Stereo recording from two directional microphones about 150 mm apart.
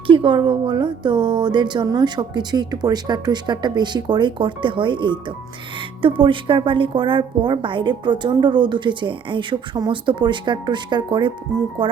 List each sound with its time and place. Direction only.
0.1 s a woman's voice: 30° right (ahead or behind)